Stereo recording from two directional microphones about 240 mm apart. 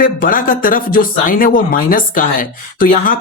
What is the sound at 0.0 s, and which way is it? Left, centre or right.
Speech, left.